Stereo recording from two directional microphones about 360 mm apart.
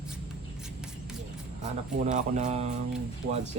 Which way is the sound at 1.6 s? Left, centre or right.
Centre.